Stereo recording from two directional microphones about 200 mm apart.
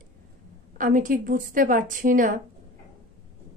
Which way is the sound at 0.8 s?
40° right (ahead or behind).